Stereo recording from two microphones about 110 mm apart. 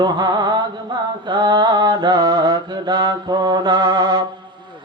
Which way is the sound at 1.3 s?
45° right (ahead or behind).